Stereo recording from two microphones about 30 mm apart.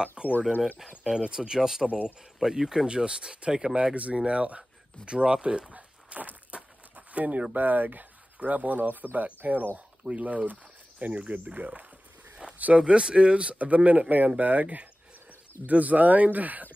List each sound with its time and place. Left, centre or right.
0.2 s a sound: right
1.0 s speech: right
2.9 s speech: right
3.9 s speech: right
4.2 s speech: right
6.5 s a sound: right
7.2 s speech: right
7.5 s speech: right
8.4 s speech: right
12.8 s speech: right
13.7 s speech: right